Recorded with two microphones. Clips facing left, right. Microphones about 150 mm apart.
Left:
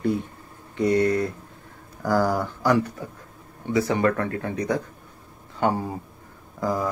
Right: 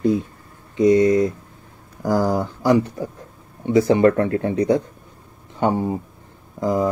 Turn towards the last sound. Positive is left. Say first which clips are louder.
# right 5 dB
turn(degrees=-20)  # may be behind; listen again after turning